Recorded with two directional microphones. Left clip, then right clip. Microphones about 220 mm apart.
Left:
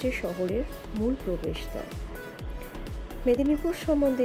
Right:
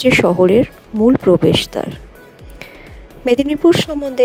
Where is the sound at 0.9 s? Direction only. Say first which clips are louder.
Right 17 dB; centre (ahead or behind).